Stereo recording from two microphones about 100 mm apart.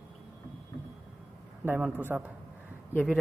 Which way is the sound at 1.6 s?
20° right (ahead or behind).